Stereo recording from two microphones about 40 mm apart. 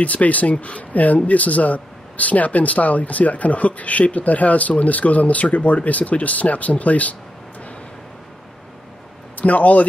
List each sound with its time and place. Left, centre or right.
0.0 s speech: left
9.4 s speech: left